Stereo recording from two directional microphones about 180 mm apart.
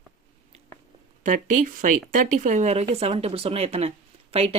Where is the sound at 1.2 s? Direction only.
45° right (ahead or behind).